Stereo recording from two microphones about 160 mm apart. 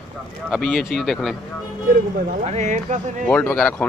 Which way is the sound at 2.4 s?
45° right (ahead or behind).